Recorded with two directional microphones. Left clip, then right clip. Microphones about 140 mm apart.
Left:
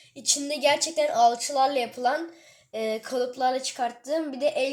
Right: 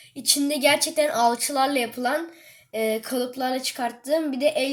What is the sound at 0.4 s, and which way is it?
A woman's voice, 15° right (ahead or behind).